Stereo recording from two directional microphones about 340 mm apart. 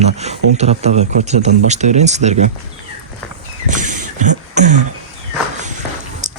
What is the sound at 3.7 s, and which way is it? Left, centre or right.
Beatboxing, right.